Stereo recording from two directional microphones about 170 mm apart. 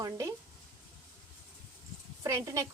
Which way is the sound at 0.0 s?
20° right (ahead or behind).